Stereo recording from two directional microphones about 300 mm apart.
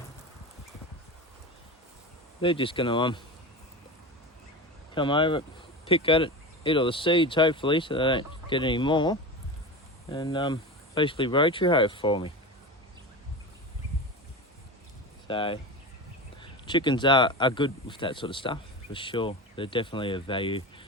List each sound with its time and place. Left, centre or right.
2.4 s speech: centre
4.9 s speech: centre
15.3 s speech: centre